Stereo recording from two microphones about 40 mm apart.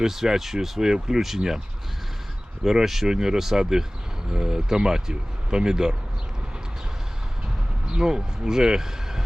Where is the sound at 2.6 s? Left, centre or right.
Centre.